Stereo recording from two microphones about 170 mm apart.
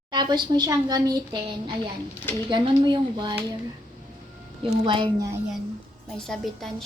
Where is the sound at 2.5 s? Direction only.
25° right (ahead or behind).